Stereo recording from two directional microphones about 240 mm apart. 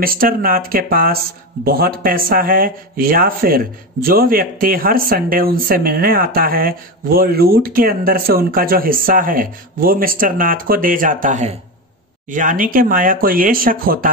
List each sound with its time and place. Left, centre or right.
0.0 s speech: right